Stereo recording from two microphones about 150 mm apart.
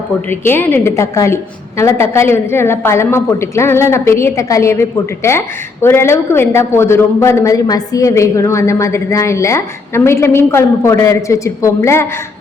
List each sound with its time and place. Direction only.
0.3 s a woman's voice: 15° left (ahead or behind)